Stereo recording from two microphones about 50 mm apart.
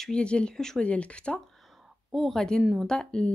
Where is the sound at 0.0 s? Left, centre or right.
Centre.